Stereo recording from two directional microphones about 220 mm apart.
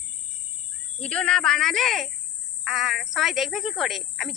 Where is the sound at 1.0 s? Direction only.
5° left (ahead or behind).